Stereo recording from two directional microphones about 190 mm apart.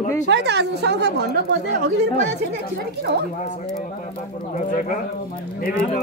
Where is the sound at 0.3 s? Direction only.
60° right (ahead or behind).